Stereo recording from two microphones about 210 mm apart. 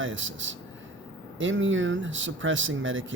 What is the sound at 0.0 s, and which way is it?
Speech, 65° right (ahead or behind).